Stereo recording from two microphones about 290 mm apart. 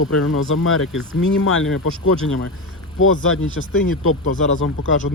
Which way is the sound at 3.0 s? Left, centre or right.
Left.